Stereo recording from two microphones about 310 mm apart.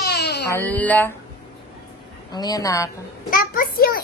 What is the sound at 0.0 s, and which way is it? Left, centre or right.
Baby cry, left.